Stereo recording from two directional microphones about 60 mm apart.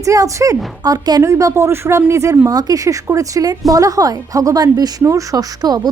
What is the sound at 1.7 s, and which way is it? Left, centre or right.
A woman's voice, right.